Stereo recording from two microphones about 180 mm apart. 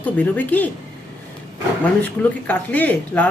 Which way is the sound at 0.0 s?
10° left (ahead or behind).